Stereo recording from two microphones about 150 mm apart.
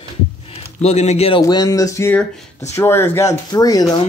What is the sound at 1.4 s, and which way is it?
Speech, 25° left (ahead or behind).